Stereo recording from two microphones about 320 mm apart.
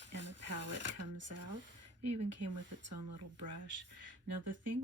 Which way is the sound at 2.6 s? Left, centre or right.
Right.